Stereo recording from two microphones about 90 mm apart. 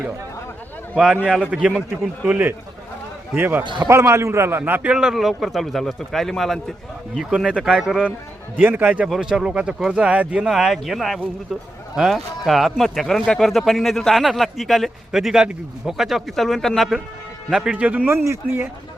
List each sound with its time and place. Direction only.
0.9 s a man's voice: 10° right (ahead or behind)
3.6 s a man's voice: 60° right (ahead or behind)
3.8 s speech: 30° right (ahead or behind); by 8.1 s 5° right (ahead or behind)
8.6 s speech: 20° right (ahead or behind)
9.0 s speech: centre (ahead or behind)
17.5 s a man's voice: 10° right (ahead or behind)